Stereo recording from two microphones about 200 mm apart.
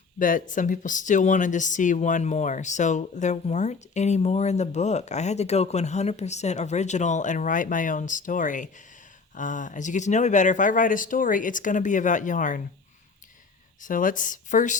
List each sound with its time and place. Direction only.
0.2 s speech: 40° left (ahead or behind)
13.8 s speech: 40° left (ahead or behind)